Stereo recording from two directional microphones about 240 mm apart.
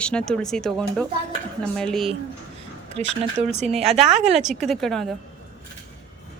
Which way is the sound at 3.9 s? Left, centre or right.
Centre.